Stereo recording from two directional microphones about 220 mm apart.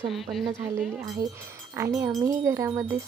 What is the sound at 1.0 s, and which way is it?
Speech, 15° right (ahead or behind).